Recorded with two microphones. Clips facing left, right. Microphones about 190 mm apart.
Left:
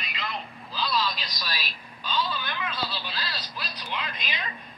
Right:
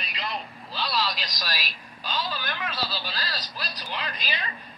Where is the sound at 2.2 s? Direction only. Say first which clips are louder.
Even; 40° right (ahead or behind).